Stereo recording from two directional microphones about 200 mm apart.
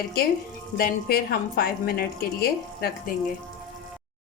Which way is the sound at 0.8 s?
50° left (ahead or behind).